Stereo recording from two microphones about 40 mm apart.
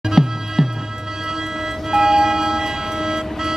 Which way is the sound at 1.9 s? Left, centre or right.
Centre.